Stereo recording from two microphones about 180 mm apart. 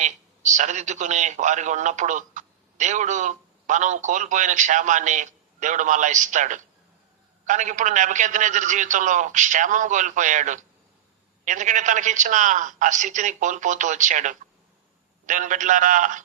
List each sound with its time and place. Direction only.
0.0 s a man's voice: 40° right (ahead or behind)